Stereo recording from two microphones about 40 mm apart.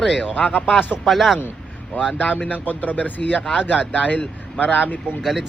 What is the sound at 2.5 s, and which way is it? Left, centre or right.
Speech, left.